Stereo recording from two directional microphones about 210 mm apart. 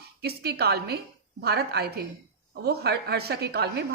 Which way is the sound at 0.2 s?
50° right (ahead or behind).